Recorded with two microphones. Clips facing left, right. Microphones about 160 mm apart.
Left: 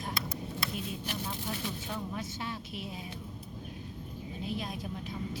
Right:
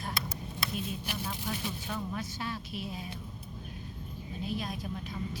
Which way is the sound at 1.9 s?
20° left (ahead or behind).